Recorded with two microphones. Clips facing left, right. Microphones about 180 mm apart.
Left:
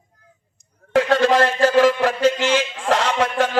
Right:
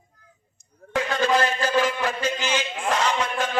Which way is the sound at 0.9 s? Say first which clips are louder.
Left 6 dB; 70° left (ahead or behind).